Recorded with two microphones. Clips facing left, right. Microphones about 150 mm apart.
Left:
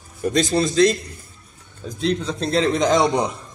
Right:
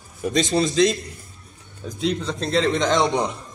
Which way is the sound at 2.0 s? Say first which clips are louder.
Left 2 dB; centre (ahead or behind).